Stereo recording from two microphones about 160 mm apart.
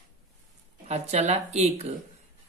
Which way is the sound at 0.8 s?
40° right (ahead or behind).